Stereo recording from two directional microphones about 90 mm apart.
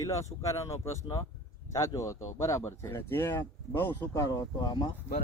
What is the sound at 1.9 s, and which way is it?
Speech, 35° left (ahead or behind).